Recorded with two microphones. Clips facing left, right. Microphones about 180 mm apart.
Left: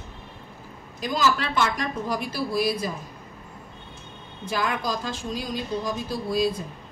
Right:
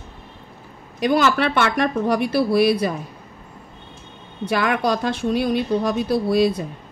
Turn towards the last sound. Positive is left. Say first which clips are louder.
# right 7 dB
turn(degrees=-70)  # may be behind; listen again after turning